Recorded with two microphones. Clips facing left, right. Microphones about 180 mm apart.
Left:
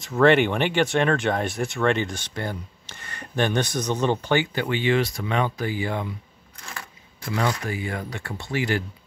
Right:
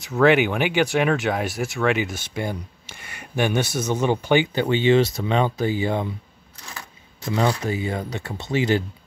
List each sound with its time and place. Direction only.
0.0 s speech: centre (ahead or behind); by 6.0 s 25° right (ahead or behind)
7.2 s speech: 25° right (ahead or behind)